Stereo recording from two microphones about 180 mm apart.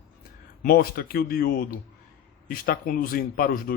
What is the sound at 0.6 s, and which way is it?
A man's voice, 55° left (ahead or behind).